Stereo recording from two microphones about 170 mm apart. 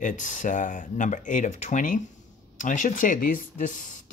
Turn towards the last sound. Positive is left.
turn(degrees=50)  # may be behind; listen again after turning